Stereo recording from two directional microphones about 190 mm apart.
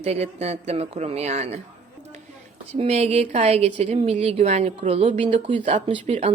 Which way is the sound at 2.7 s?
35° right (ahead or behind).